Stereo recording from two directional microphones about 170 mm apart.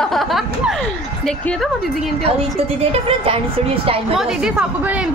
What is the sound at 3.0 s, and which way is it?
Speech, 35° right (ahead or behind).